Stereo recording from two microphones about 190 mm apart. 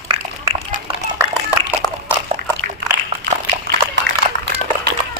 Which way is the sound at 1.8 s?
20° left (ahead or behind).